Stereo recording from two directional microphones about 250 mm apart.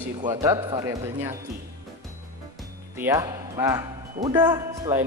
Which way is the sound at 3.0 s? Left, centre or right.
Centre.